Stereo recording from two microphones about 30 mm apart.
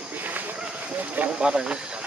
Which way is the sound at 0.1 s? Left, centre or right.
Right.